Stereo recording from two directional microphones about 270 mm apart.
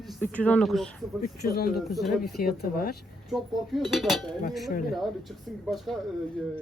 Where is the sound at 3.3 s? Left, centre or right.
Centre.